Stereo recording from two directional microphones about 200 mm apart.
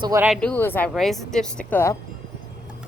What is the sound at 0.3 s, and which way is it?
A woman's voice, 5° left (ahead or behind).